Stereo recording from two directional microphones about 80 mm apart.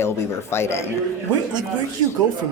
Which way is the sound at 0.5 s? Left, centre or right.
Left.